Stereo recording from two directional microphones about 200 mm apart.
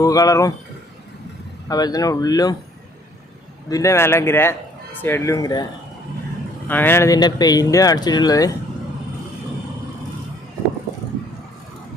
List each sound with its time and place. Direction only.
0.0 s speech: 15° left (ahead or behind)
1.6 s speech: 20° left (ahead or behind)
3.7 s speech: 15° left (ahead or behind)
6.7 s speech: 10° left (ahead or behind)